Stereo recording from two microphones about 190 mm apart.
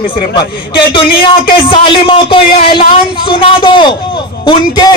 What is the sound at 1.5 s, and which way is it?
A woman's voice, 30° left (ahead or behind).